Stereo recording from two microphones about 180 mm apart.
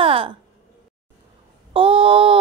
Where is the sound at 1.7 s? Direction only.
30° right (ahead or behind).